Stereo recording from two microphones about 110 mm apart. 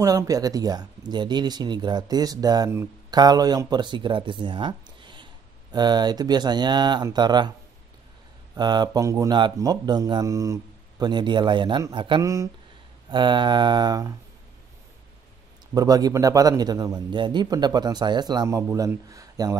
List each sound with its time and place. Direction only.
0.0 s a man's voice: 30° right (ahead or behind)
8.5 s a man's voice: 40° right (ahead or behind)
11.9 s mantra: 45° right (ahead or behind)
12.2 s speech: 30° right (ahead or behind)
13.1 s mantra: 45° right (ahead or behind)
15.7 s a man's voice: 35° right (ahead or behind)
18.6 s a man's voice: 25° right (ahead or behind)